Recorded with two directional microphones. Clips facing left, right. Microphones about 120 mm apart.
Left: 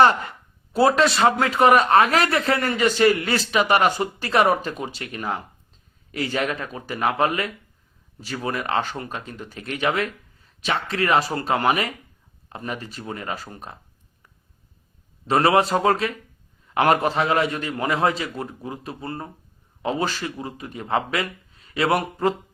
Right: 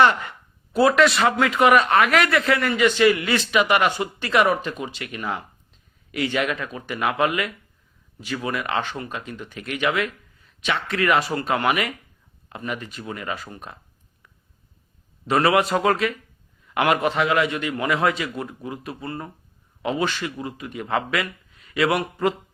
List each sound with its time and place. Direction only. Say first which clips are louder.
0.0 s speech: left 1 dB; 35° left (ahead or behind)
15.3 s speech: left 1 dB; 35° left (ahead or behind)